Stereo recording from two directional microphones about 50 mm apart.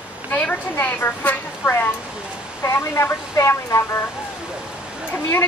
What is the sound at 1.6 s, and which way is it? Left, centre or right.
Speech, left.